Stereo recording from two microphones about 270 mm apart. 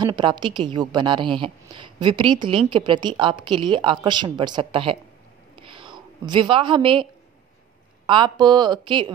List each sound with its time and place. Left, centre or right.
0.0 s a woman's voice: centre
5.6 s a sound: centre
8.1 s a woman's voice: centre